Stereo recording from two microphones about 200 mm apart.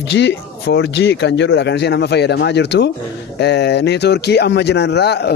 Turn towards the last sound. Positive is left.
turn(degrees=55)  # may be behind; listen again after turning